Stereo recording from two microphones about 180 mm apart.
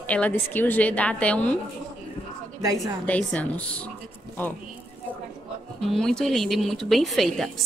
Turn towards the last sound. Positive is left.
turn(degrees=0)  # may be behind; listen again after turning